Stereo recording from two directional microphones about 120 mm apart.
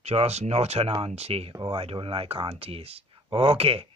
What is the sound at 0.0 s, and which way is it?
Speech, 60° right (ahead or behind).